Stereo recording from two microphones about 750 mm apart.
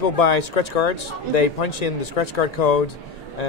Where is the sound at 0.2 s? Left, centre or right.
Left.